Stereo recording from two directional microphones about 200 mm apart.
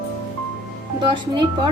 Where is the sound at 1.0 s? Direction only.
20° right (ahead or behind).